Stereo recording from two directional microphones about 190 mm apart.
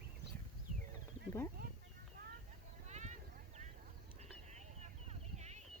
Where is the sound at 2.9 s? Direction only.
40° right (ahead or behind).